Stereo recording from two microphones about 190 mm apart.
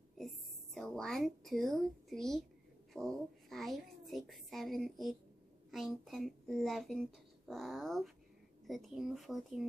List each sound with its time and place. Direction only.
0.7 s a child's voice: 5° left (ahead or behind)